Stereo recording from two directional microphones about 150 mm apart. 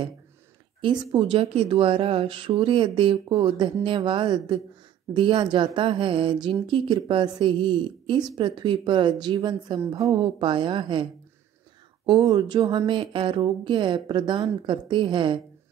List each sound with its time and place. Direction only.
0.7 s a woman's voice: 30° right (ahead or behind)
12.1 s speech: 30° right (ahead or behind)